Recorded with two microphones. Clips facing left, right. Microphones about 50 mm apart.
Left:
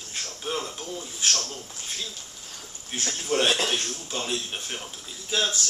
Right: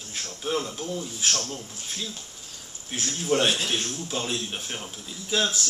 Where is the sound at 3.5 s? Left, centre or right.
Left.